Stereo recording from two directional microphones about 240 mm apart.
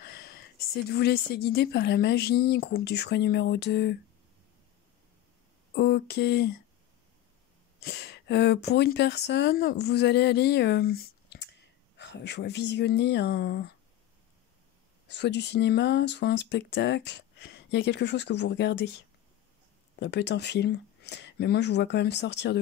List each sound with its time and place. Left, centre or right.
0.0 s a sound: left
0.8 s speech: left
5.8 s a sound: left
7.8 s speech: left
15.0 s speech: left
20.0 s speech: left